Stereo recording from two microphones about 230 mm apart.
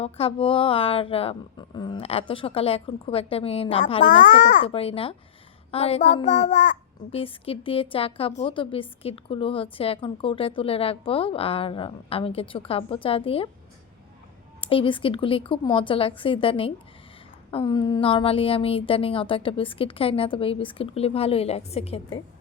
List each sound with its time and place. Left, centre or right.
0.0 s a woman's voice: left
14.6 s a woman's voice: left